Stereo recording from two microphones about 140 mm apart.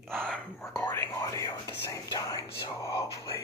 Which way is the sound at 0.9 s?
20° left (ahead or behind).